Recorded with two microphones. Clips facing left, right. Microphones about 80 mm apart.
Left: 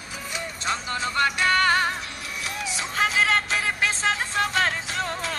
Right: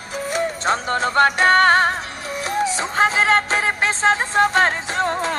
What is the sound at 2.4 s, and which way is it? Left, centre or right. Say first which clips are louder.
Music: right 11 dB; right.